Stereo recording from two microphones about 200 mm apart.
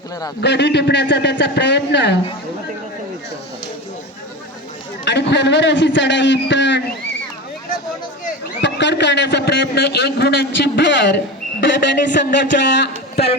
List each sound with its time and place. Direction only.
0.4 s a man's voice: 60° left (ahead or behind)
5.0 s a man's voice: 60° left (ahead or behind)
8.6 s a man's voice: 60° left (ahead or behind)